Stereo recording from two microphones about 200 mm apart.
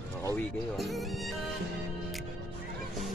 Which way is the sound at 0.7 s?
Centre (ahead or behind).